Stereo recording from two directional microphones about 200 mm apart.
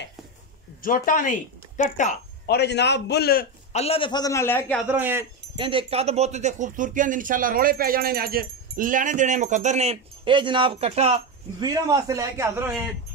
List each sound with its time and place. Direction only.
0.8 s speech: 45° left (ahead or behind)
2.4 s a man's voice: 55° left (ahead or behind)
3.7 s a man's voice: 30° left (ahead or behind); by 4.8 s 10° left (ahead or behind)
4.8 s a man's voice: 10° right (ahead or behind)
5.6 s speech: 25° right (ahead or behind)
11.6 s a man's voice: 20° right (ahead or behind)